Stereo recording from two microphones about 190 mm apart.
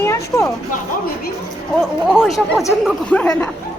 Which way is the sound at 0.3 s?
15° left (ahead or behind).